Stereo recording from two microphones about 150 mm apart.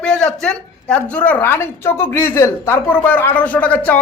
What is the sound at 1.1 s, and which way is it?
Speech, 10° left (ahead or behind).